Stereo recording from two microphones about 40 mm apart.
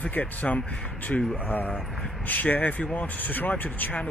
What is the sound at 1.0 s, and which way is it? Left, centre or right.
Speech, left.